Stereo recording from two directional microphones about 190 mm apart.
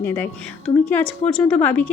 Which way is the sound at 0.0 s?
10° left (ahead or behind).